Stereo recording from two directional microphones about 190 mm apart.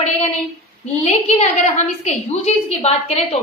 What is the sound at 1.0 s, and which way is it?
A woman's voice, 35° left (ahead or behind).